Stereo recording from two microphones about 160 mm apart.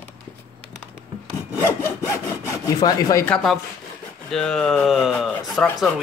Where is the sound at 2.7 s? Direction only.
25° left (ahead or behind).